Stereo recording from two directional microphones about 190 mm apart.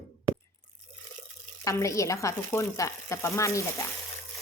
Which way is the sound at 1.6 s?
15° left (ahead or behind).